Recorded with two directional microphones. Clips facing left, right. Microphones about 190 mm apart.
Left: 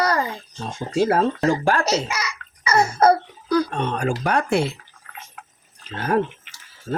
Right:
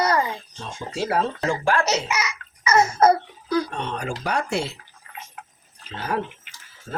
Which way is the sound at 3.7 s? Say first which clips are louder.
Left 5 dB; 50° left (ahead or behind).